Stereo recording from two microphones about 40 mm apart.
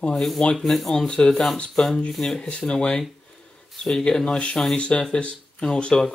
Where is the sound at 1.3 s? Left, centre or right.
Centre.